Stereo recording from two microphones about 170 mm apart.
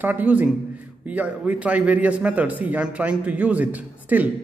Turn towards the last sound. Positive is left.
turn(degrees=-10)  # may be behind; listen again after turning